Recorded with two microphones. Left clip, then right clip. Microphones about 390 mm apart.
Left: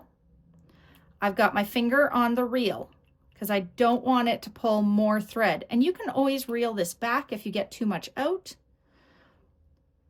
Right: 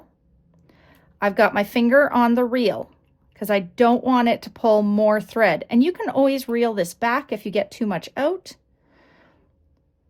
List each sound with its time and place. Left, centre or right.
0.5 s a woman's voice: centre